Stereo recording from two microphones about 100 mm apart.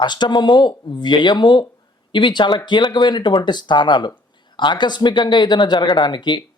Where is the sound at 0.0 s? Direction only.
50° left (ahead or behind).